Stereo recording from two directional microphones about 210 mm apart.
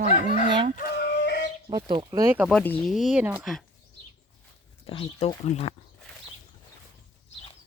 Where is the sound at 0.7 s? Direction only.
50° left (ahead or behind).